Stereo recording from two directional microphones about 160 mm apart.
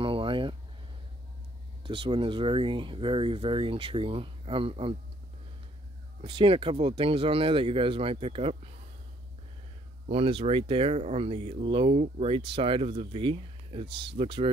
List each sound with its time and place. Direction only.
0.0 s a sound: 35° right (ahead or behind)
1.8 s speech: 30° right (ahead or behind)
6.2 s speech: 35° right (ahead or behind)
10.0 s speech: 35° right (ahead or behind)